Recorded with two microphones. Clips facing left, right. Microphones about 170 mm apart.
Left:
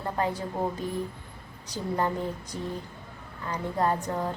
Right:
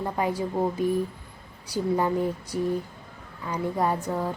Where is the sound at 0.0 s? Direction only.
10° right (ahead or behind).